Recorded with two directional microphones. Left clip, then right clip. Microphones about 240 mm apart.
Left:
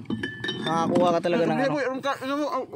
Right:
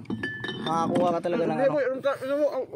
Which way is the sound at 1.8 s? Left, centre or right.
Left.